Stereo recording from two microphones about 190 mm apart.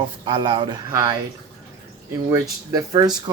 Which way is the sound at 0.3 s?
25° right (ahead or behind).